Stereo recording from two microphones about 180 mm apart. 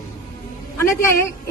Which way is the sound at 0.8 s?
15° left (ahead or behind).